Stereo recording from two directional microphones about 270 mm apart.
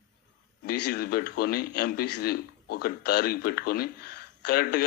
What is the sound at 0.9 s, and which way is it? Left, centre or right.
A man's voice, left.